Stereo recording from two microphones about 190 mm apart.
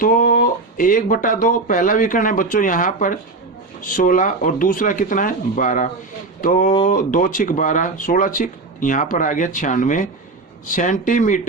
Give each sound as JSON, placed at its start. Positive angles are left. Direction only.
{"t": 0.0, "sound": "speech", "side_deg": 45}